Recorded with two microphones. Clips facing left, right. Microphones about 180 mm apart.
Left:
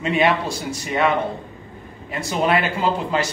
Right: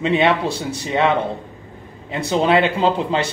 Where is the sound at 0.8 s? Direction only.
25° right (ahead or behind).